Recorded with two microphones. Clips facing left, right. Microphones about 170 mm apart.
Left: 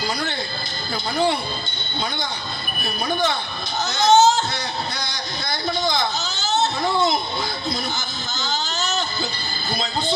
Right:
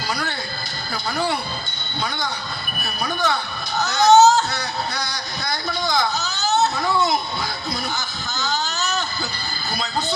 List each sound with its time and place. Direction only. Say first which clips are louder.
1.1 s speech: left 3 dB; 25° left (ahead or behind)
3.0 s speech: even; 25° left (ahead or behind)